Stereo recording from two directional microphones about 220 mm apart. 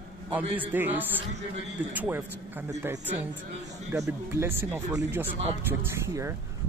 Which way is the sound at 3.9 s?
10° right (ahead or behind).